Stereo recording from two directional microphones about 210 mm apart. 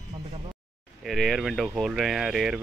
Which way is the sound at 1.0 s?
Centre (ahead or behind).